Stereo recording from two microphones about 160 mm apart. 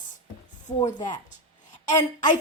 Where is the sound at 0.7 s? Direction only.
40° left (ahead or behind).